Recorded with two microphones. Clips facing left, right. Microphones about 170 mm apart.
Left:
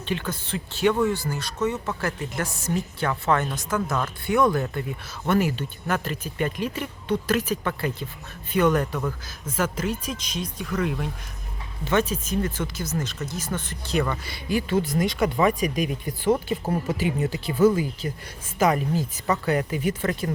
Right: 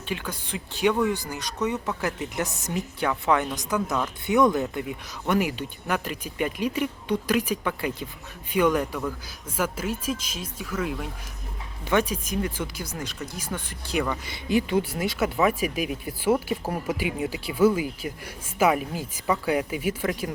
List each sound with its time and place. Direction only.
0.0 s speech: 10° right (ahead or behind)
14.3 s speech: 20° right (ahead or behind)